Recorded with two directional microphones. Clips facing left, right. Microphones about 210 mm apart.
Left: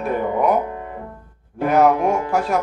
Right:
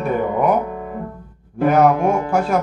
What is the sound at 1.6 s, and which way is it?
Speech, centre (ahead or behind).